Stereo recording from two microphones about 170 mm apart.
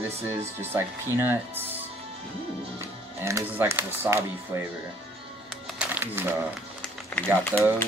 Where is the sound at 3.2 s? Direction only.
15° right (ahead or behind).